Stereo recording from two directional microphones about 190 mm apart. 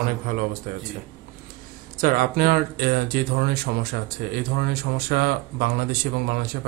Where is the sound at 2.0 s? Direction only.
50° right (ahead or behind).